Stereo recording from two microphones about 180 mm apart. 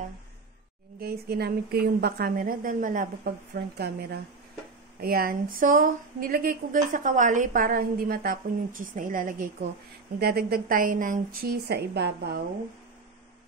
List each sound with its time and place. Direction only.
0.9 s a woman's voice: 60° right (ahead or behind)
10.1 s a woman's voice: 60° right (ahead or behind)